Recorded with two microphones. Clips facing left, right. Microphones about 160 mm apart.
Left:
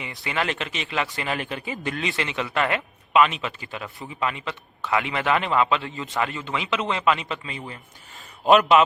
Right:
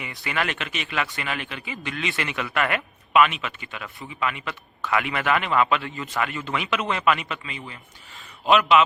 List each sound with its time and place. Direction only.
0.3 s speech: 25° left (ahead or behind)
2.1 s speech: 25° left (ahead or behind)
3.3 s speech: 35° left (ahead or behind)
8.4 s speech: 40° left (ahead or behind)